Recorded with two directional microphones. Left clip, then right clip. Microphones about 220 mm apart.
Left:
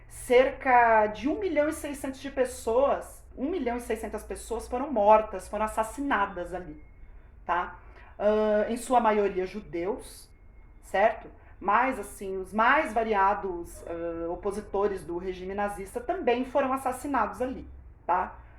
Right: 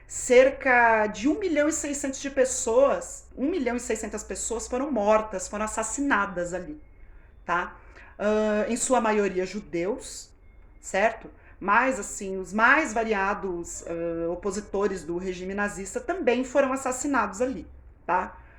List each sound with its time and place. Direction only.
0.3 s a woman's voice: 50° right (ahead or behind)
11.6 s a woman's voice: 50° right (ahead or behind)